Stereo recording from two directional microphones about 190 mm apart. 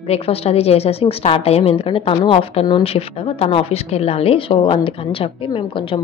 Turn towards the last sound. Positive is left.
turn(degrees=25)  # may be behind; listen again after turning